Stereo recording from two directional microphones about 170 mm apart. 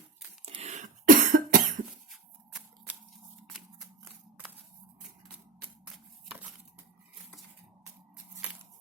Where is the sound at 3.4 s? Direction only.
Centre (ahead or behind).